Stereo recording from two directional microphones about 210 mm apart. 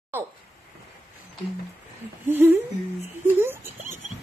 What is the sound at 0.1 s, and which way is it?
Speech, 10° right (ahead or behind).